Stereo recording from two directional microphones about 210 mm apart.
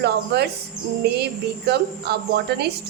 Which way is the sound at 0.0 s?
50° right (ahead or behind).